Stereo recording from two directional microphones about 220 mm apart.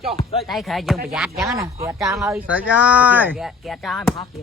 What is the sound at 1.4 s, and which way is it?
Speech, 15° right (ahead or behind).